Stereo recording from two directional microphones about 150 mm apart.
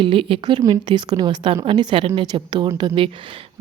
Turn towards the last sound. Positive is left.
turn(degrees=-35)  # may be behind; listen again after turning